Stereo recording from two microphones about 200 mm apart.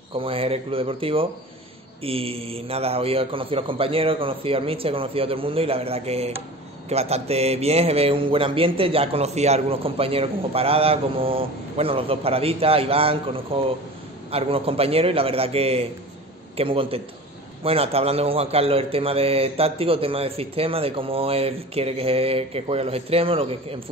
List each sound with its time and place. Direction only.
0.1 s speech: 25° right (ahead or behind)